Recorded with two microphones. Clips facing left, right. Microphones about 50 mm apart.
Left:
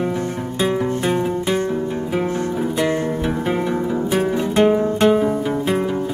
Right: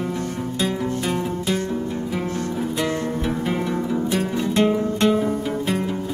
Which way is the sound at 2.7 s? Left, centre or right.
Left.